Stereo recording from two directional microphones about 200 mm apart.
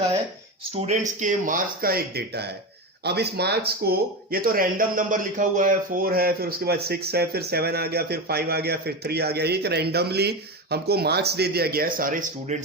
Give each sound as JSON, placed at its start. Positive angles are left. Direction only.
{"t": 0.8, "sound": "speech", "side_deg": -35}